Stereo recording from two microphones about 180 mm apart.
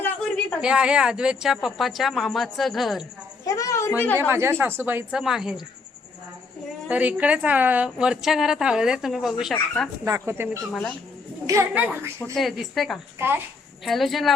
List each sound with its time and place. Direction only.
0.6 s a woman's voice: 5° right (ahead or behind)
3.4 s a woman's voice: 20° left (ahead or behind)
4.3 s a woman's voice: 15° right (ahead or behind)
6.8 s a woman's voice: 10° right (ahead or behind)
10.0 s a woman's voice: 15° right (ahead or behind)
10.7 s a woman's voice: 5° left (ahead or behind)
11.4 s a woman's voice: 15° right (ahead or behind)
12.2 s a woman's voice: centre (ahead or behind)
13.1 s a woman's voice: 15° right (ahead or behind)
13.8 s a woman's voice: centre (ahead or behind)